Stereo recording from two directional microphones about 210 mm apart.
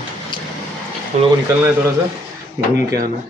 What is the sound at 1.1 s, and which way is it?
Speech, 35° right (ahead or behind).